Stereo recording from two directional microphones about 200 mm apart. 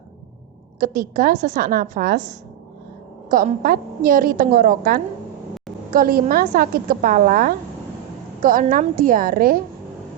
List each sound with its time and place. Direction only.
0.8 s a woman's voice: 45° right (ahead or behind)
3.2 s a woman's voice: 45° right (ahead or behind)